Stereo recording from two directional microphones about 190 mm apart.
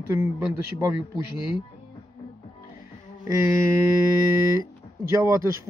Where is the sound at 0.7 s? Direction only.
15° right (ahead or behind).